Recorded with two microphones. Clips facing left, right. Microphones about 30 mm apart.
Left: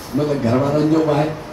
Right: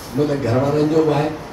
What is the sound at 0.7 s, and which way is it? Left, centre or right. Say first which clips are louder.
Speech: even; centre.